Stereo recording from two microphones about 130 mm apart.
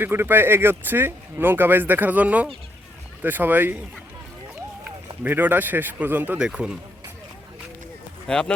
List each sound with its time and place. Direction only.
0.0 s speech: 15° right (ahead or behind)
5.2 s speech: 15° right (ahead or behind)
8.3 s speech: 5° left (ahead or behind)